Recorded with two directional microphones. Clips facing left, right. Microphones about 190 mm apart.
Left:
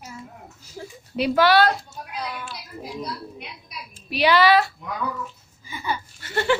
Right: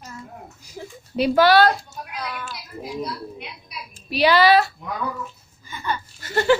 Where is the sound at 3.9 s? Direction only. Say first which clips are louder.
Right 1 dB; 35° right (ahead or behind).